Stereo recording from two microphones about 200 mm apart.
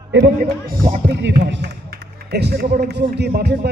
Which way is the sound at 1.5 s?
55° right (ahead or behind).